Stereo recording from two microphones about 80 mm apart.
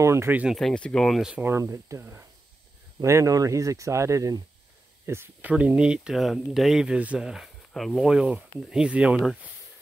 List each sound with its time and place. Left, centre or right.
0.0 s speech: right
0.5 s speech: centre
1.6 s speech: right
5.0 s speech: right
5.4 s speech: centre
6.1 s speech: centre
7.2 s speech: centre
8.1 s speech: centre